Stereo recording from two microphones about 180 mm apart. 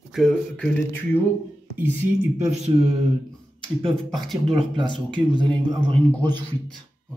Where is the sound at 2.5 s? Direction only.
40° right (ahead or behind).